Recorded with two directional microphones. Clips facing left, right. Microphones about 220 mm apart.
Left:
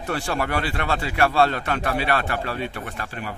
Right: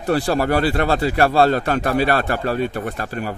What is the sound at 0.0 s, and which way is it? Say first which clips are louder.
Speech: right 7 dB; 35° right (ahead or behind).